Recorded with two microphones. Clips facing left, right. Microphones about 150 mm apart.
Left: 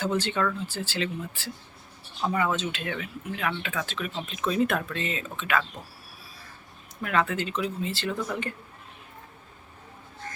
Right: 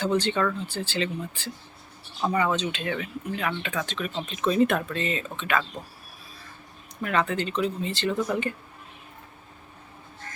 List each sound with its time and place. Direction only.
0.0 s speech: 5° left (ahead or behind)
7.0 s speech: 5° left (ahead or behind)